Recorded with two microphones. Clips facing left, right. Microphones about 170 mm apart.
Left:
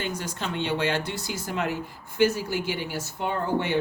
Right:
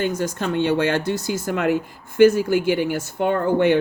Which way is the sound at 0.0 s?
45° right (ahead or behind).